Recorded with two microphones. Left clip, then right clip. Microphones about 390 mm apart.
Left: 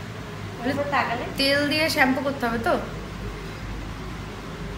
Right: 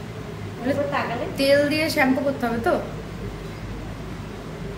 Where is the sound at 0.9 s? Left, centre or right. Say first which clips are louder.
Left 1 dB; centre.